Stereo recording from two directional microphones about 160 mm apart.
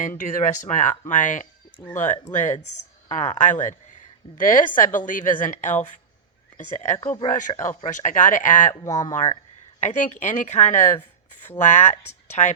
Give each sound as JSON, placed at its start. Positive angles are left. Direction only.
{"t": 0.2, "sound": "speech", "side_deg": 55}
{"t": 8.8, "sound": "speech", "side_deg": 20}
{"t": 9.8, "sound": "speech", "side_deg": 50}